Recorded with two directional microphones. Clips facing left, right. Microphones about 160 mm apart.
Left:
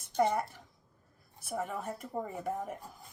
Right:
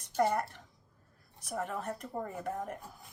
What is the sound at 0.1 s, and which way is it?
Speech, 10° right (ahead or behind).